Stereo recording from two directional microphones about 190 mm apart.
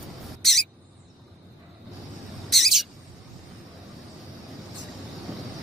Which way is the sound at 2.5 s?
Centre (ahead or behind).